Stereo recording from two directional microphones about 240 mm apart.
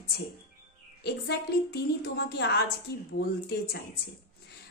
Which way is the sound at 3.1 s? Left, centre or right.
Left.